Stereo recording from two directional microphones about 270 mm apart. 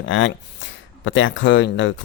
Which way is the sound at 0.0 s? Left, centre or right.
Left.